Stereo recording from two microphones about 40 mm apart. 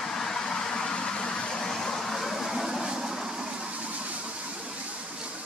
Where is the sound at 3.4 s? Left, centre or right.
Right.